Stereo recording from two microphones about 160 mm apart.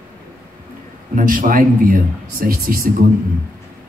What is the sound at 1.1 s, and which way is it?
A man's voice, 55° right (ahead or behind).